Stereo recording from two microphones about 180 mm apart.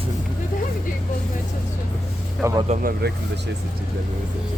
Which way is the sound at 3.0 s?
65° right (ahead or behind).